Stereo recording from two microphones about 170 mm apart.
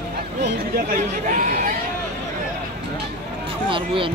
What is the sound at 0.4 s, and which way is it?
Speech, 60° right (ahead or behind).